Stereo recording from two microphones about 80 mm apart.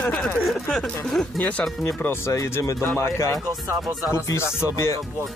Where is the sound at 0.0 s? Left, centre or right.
Centre.